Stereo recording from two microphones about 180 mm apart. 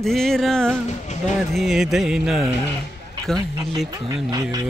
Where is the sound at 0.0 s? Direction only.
Centre (ahead or behind).